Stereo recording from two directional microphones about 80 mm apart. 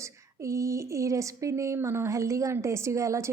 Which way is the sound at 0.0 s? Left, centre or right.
Right.